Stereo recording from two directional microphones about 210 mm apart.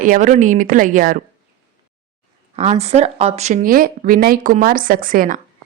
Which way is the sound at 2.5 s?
30° right (ahead or behind).